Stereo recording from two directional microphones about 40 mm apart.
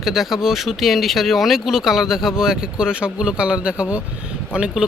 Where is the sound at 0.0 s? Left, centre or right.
Centre; by 4.7 s right.